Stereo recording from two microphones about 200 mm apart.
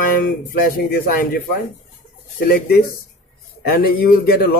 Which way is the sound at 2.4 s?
50° left (ahead or behind).